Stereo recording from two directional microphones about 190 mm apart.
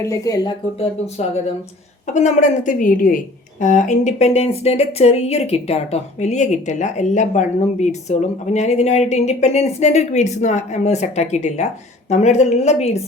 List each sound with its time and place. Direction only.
0.0 s speech: 15° left (ahead or behind)
2.1 s speech: 40° left (ahead or behind)